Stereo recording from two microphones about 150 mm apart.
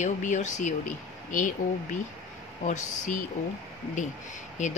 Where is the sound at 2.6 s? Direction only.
55° left (ahead or behind).